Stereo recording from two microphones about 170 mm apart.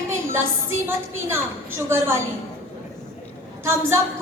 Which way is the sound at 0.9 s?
15° right (ahead or behind).